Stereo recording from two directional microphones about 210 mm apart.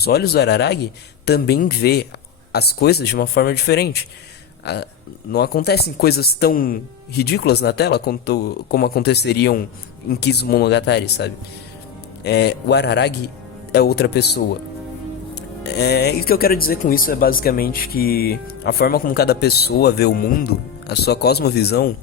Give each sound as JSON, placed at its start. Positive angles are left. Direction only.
{"t": 0.0, "sound": "speech", "side_deg": 50}